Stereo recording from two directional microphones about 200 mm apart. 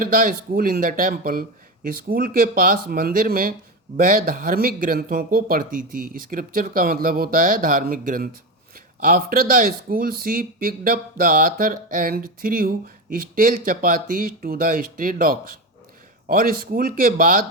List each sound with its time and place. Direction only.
0.0 s speech: 45° right (ahead or behind)